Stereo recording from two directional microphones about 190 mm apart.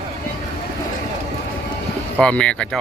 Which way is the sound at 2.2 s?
5° left (ahead or behind).